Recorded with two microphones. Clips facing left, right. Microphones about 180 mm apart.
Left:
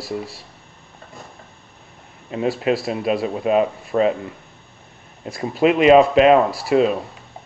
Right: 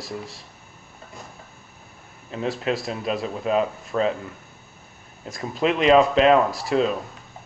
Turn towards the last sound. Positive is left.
turn(degrees=5)  # may be behind; listen again after turning